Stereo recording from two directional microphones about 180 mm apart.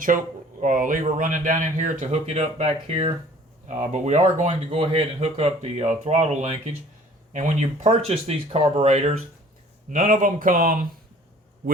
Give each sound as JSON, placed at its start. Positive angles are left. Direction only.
{"t": 0.6, "sound": "speech", "side_deg": -45}
{"t": 9.9, "sound": "speech", "side_deg": -45}